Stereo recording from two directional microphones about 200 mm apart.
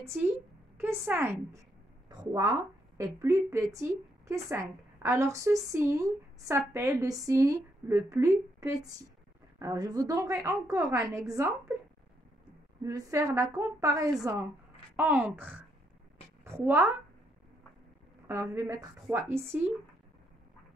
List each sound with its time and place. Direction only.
0.2 s a woman's voice: 10° right (ahead or behind)
2.0 s a sound: 20° right (ahead or behind)
3.0 s a woman's voice: 15° right (ahead or behind)
12.8 s a woman's voice: 15° right (ahead or behind)
18.2 s a woman's voice: 15° right (ahead or behind)